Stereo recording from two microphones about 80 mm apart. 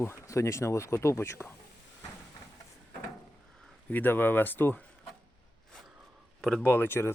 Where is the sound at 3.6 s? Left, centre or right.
Centre.